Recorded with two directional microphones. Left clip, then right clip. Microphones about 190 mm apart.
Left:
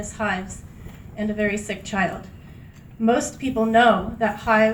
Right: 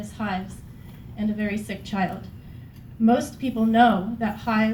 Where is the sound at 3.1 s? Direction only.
50° left (ahead or behind).